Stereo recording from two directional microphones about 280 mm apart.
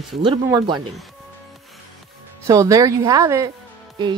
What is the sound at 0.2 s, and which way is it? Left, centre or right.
Speech, centre.